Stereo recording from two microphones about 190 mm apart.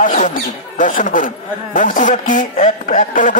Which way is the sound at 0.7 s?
45° left (ahead or behind).